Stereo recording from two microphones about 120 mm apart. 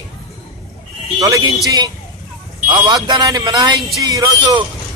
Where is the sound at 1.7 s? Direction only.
35° right (ahead or behind).